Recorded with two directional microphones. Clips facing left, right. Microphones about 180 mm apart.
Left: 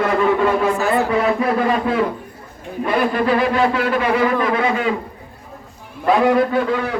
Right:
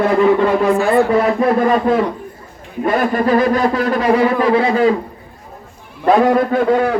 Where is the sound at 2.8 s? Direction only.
45° right (ahead or behind).